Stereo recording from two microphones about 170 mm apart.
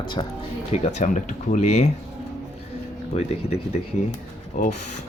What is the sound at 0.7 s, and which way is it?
Speech, 40° left (ahead or behind).